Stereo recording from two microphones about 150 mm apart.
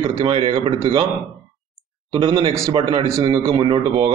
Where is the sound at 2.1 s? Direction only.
35° right (ahead or behind).